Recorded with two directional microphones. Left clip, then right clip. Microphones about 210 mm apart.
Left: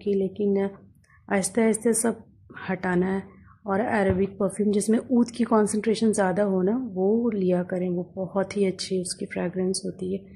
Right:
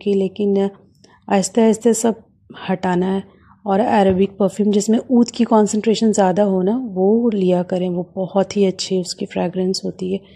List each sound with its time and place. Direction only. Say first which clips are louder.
0.0 s a woman's voice: right 7 dB; 25° right (ahead or behind)